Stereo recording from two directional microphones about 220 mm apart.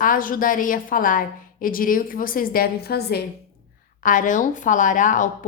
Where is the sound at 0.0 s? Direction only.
40° left (ahead or behind).